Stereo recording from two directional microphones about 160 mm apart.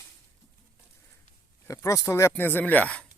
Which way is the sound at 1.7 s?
20° left (ahead or behind).